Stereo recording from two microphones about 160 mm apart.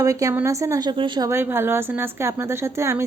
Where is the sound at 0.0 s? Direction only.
20° right (ahead or behind).